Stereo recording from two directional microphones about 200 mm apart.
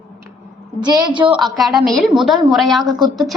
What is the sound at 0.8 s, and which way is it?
Speech, 20° right (ahead or behind).